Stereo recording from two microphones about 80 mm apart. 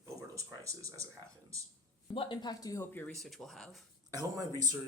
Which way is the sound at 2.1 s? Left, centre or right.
Left.